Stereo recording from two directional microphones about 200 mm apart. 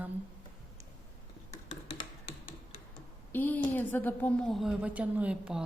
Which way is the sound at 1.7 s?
30° left (ahead or behind).